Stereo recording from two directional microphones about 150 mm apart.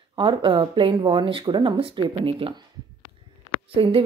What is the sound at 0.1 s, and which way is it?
A woman's voice, 35° right (ahead or behind).